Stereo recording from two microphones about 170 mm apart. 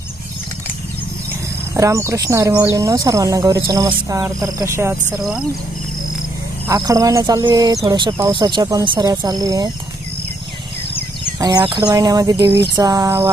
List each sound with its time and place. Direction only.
1.7 s speech: 20° right (ahead or behind)
6.7 s speech: 20° right (ahead or behind)
11.3 s speech: 25° right (ahead or behind)
12.7 s music: 20° right (ahead or behind)